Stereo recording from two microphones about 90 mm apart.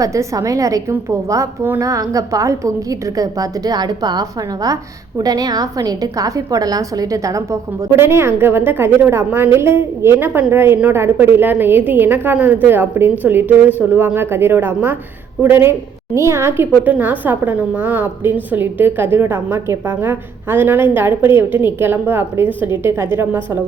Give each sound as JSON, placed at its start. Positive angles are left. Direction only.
{"t": 0.0, "sound": "a woman's voice", "side_deg": -35}
{"t": 7.9, "sound": "a woman's voice", "side_deg": -25}
{"t": 16.1, "sound": "a woman's voice", "side_deg": -30}